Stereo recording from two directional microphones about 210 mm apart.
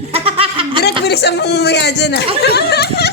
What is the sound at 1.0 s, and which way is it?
Speech, 50° left (ahead or behind).